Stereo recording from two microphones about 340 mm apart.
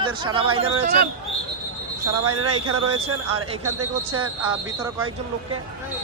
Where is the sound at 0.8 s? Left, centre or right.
Right.